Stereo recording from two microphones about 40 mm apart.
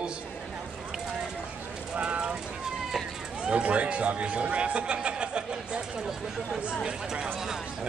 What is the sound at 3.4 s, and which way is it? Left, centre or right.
Speech, right.